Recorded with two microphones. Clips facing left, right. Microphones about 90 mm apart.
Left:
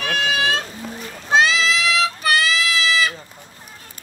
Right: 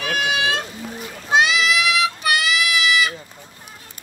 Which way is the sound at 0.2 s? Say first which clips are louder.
Left 1 dB; 40° left (ahead or behind).